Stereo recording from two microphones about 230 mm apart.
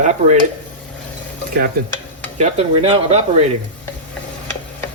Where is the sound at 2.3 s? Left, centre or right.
Right.